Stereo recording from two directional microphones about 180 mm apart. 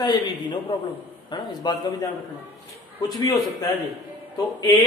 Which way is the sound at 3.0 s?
20° left (ahead or behind).